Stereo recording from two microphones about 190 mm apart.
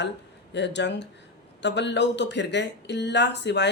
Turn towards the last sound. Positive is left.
turn(degrees=65)  # may be behind; listen again after turning